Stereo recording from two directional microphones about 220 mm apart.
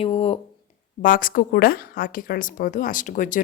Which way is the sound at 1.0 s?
40° left (ahead or behind).